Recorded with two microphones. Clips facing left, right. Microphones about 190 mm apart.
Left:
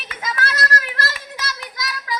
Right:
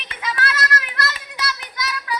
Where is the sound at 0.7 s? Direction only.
40° left (ahead or behind).